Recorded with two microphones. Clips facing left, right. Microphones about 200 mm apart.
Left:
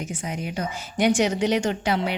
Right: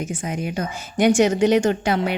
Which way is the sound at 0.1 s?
50° right (ahead or behind).